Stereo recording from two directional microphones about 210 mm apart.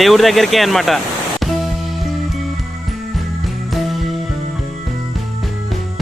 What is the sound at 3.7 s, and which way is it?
Music, centre (ahead or behind).